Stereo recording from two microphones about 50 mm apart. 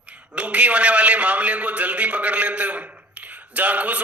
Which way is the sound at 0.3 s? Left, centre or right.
Right.